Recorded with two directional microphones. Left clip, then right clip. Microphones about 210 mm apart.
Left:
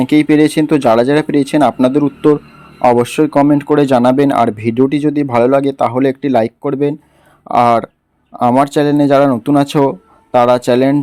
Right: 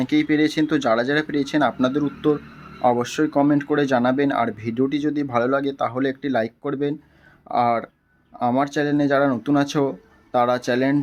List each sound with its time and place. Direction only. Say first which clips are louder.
0.0 s speech: left 9 dB; 35° left (ahead or behind)